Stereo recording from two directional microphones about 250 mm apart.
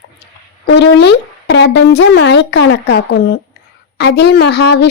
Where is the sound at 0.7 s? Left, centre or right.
Left.